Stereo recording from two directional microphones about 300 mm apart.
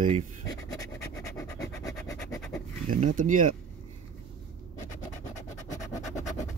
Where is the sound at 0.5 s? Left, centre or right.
Centre.